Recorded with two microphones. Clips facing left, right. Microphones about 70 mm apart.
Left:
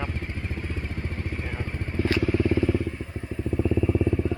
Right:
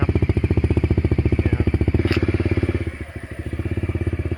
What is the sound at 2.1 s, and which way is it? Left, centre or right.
Vehicle, right.